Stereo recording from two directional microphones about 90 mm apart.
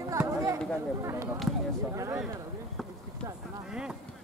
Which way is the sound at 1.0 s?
35° right (ahead or behind).